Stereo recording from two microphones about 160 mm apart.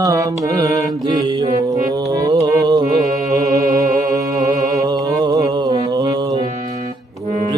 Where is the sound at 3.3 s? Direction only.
20° right (ahead or behind).